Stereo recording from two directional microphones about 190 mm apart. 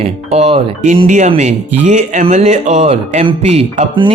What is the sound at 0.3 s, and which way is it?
Speech, 35° right (ahead or behind).